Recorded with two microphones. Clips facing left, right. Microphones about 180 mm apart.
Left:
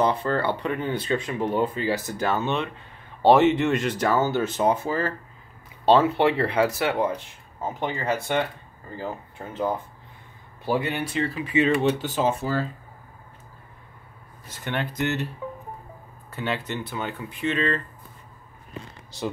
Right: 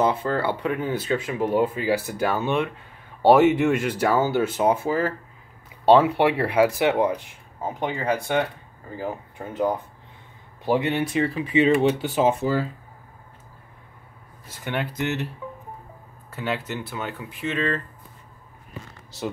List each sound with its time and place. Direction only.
0.0 s speech: 5° right (ahead or behind)
14.6 s speech: 10° right (ahead or behind)
16.3 s speech: 5° right (ahead or behind)
19.1 s speech: 5° right (ahead or behind)